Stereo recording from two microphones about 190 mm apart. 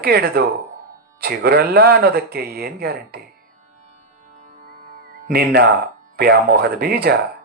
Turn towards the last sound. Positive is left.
turn(degrees=-55)  # may be behind; listen again after turning